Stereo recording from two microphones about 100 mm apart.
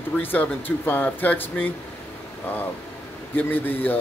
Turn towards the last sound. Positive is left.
turn(degrees=20)  # may be behind; listen again after turning